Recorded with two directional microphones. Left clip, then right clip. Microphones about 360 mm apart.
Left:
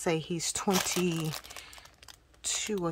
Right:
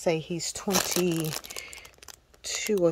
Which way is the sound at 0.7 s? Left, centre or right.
Right.